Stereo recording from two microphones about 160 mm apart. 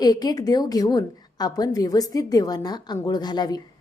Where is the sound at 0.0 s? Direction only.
25° left (ahead or behind).